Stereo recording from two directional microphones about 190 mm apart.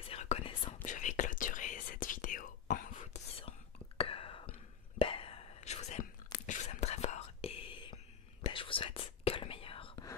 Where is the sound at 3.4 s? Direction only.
30° left (ahead or behind).